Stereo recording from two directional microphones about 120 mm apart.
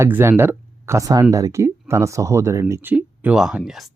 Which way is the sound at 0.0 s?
20° right (ahead or behind).